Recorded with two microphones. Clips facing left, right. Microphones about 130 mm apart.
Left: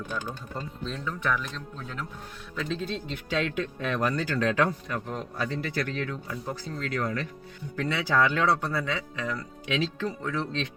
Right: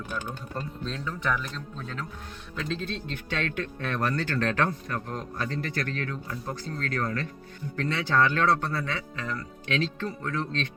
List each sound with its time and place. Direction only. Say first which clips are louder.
0.5 s speech: right 2 dB; 5° left (ahead or behind)
2.6 s speech: left 1 dB; 5° left (ahead or behind)